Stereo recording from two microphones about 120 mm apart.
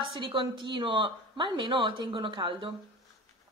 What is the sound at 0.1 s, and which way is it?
Speech, 45° right (ahead or behind).